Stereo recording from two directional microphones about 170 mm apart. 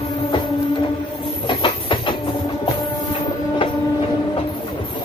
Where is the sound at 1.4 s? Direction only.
30° left (ahead or behind).